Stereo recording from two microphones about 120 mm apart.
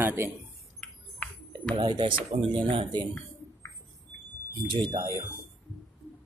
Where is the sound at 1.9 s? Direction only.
40° right (ahead or behind).